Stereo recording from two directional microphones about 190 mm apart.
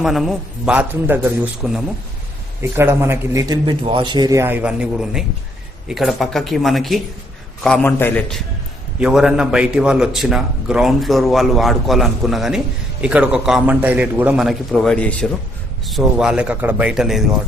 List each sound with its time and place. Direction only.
0.0 s a man's voice: centre (ahead or behind)